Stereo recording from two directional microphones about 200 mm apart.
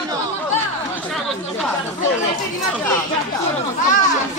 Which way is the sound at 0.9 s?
Centre (ahead or behind).